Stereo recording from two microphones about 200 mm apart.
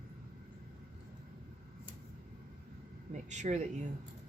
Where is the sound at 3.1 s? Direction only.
35° right (ahead or behind).